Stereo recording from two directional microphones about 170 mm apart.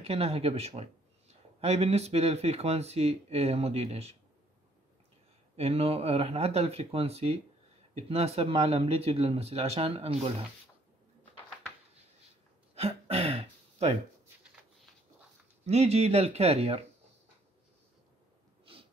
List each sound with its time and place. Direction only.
0.0 s speech: 35° right (ahead or behind)
5.6 s speech: 35° right (ahead or behind)
12.7 s throat clearing: 35° right (ahead or behind)
15.6 s speech: 40° right (ahead or behind)